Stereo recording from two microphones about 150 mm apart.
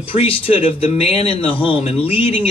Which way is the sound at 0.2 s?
40° left (ahead or behind).